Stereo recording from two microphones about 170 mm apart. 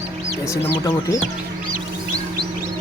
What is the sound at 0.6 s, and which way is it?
Speech, 20° left (ahead or behind).